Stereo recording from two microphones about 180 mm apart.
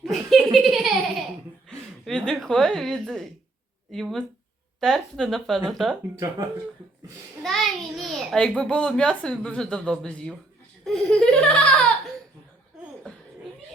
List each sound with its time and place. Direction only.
0.0 s laughter: centre (ahead or behind)
2.0 s a woman's voice: centre (ahead or behind)
7.4 s a child's voice: centre (ahead or behind)